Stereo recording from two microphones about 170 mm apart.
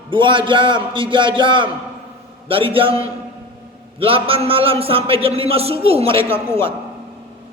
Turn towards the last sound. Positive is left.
turn(degrees=-35)  # may be behind; listen again after turning